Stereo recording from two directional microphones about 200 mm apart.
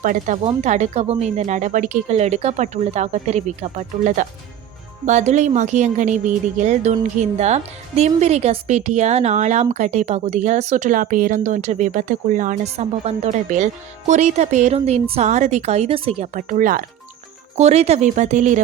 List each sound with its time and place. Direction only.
0.0 s speech: 40° right (ahead or behind)